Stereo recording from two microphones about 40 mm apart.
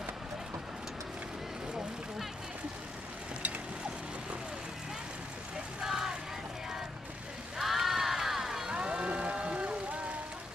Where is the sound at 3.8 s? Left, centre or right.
Right.